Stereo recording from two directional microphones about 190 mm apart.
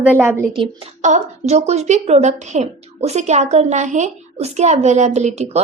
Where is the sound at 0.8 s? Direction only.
35° right (ahead or behind).